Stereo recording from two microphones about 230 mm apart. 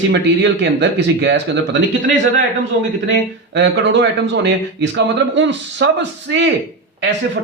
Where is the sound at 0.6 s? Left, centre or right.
Right.